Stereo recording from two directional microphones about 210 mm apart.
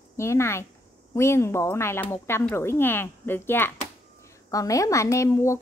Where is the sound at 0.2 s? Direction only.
15° left (ahead or behind).